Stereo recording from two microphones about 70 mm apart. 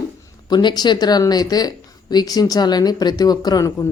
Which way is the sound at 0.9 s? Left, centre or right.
Left.